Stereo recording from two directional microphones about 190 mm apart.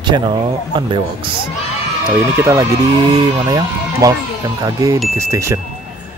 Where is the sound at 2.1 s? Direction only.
15° right (ahead or behind).